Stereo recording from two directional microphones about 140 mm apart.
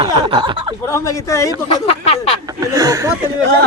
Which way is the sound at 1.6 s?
45° left (ahead or behind).